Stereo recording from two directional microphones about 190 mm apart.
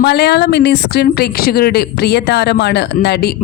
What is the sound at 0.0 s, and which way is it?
Speech, 60° left (ahead or behind).